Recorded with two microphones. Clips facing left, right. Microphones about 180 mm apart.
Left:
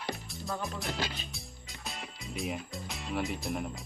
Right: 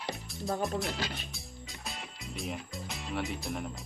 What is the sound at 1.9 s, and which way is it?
Music, centre (ahead or behind).